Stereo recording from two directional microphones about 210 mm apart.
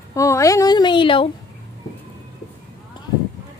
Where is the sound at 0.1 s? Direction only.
15° left (ahead or behind).